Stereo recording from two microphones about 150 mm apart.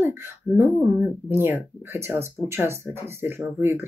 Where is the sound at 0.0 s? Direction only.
15° right (ahead or behind).